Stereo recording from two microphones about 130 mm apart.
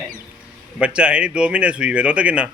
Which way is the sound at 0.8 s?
10° right (ahead or behind).